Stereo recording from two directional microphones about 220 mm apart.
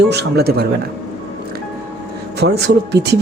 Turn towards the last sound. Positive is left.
turn(degrees=-50)  # may be behind; listen again after turning